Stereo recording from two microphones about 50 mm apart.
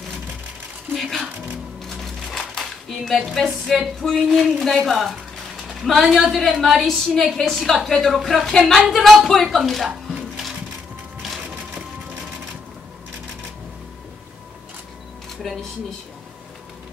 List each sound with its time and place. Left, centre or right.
0.9 s music: centre
1.9 s a sound: centre
3.3 s a woman's voice: centre
4.2 s a woman's voice: centre
11.2 s music: centre